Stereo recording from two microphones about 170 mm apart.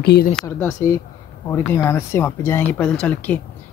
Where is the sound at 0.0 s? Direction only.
75° left (ahead or behind).